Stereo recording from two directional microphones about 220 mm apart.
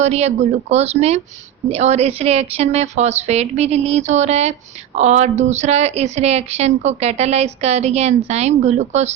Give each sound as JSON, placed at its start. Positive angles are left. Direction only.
{"t": 0.0, "sound": "speech", "side_deg": -30}